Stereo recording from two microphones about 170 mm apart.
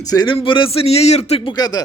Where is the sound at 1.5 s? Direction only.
25° left (ahead or behind).